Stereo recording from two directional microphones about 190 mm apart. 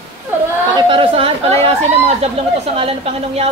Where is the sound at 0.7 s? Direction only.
25° right (ahead or behind).